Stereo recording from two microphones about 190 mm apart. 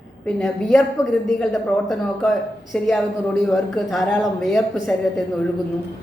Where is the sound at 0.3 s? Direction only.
Centre (ahead or behind).